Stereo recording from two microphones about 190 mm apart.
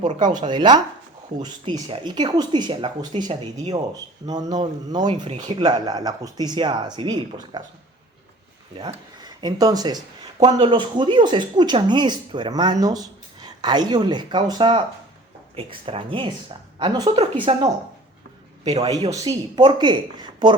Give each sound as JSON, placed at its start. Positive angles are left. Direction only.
{"t": 0.0, "sound": "speech", "side_deg": -20}
{"t": 8.9, "sound": "speech", "side_deg": -20}
{"t": 18.9, "sound": "speech", "side_deg": -20}